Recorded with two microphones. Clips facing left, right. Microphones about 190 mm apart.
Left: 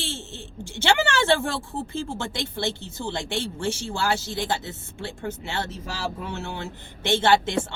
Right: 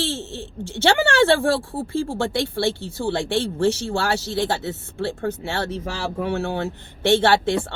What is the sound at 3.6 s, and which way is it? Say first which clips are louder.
Speech: right 7 dB; 60° right (ahead or behind).